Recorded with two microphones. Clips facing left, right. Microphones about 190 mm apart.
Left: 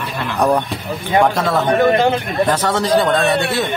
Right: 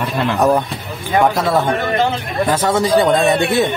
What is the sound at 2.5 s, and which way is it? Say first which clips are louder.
Speech: right 4 dB; 10° right (ahead or behind).